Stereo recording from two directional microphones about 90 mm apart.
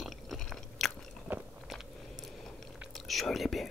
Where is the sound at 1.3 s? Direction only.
20° right (ahead or behind).